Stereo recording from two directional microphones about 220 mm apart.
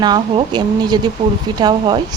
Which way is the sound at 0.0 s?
20° right (ahead or behind).